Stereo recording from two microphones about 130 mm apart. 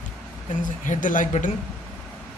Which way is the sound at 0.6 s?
85° left.